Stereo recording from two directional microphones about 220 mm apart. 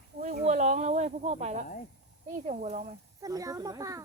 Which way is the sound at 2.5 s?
35° right (ahead or behind).